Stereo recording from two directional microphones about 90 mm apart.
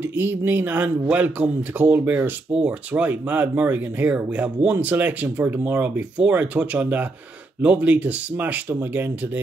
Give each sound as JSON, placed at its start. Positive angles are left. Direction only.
{"t": 0.0, "sound": "speech", "side_deg": -25}